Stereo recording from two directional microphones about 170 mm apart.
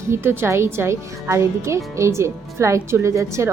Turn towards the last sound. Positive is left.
turn(degrees=-15)  # may be behind; listen again after turning